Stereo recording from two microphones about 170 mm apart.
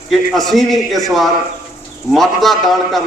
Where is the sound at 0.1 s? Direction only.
Centre (ahead or behind).